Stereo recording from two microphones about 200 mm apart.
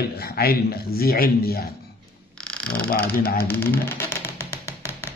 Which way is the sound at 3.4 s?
10° left (ahead or behind).